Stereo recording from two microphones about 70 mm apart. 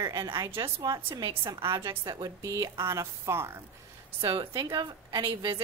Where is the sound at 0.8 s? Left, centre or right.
Right.